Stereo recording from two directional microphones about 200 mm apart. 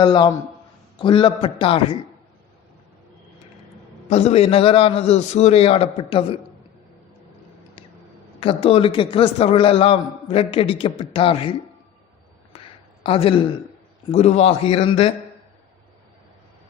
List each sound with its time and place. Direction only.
0.0 s a man's voice: 20° left (ahead or behind)
4.1 s a man's voice: 30° left (ahead or behind)
8.4 s a man's voice: 30° left (ahead or behind)
12.5 s a sound: 25° left (ahead or behind)
14.1 s a man's voice: 35° left (ahead or behind)